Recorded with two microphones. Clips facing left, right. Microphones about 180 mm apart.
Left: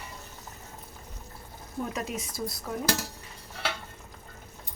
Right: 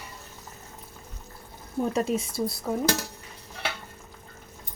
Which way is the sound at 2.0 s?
30° right (ahead or behind).